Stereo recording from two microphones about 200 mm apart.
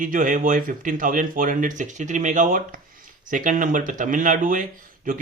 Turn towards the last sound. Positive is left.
turn(degrees=-40)  # may be behind; listen again after turning